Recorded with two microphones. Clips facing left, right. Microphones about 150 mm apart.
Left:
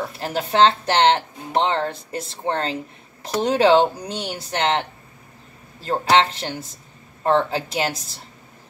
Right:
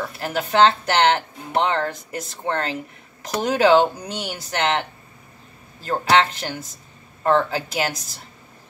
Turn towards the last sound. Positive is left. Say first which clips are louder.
# left 1 dB
turn(degrees=30)  # may be behind; listen again after turning